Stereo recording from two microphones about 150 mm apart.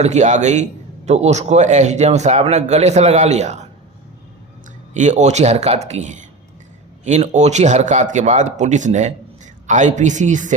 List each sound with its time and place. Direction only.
0.0 s a man's voice: 50° right (ahead or behind)
4.9 s a man's voice: 50° right (ahead or behind)